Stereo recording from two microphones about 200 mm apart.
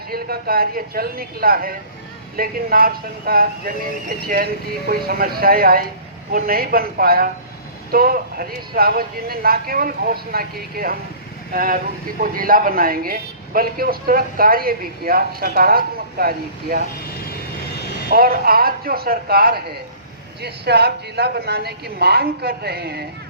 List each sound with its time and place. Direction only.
0.1 s a man's voice: 50° right (ahead or behind)
4.9 s a man's voice: 45° right (ahead or behind)
18.1 s a man's voice: 50° right (ahead or behind)